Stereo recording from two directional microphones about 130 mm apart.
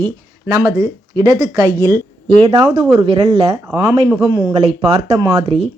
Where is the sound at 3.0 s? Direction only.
35° right (ahead or behind).